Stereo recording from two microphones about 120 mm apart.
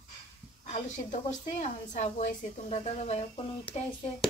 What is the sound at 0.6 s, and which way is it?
Speech, 75° left (ahead or behind).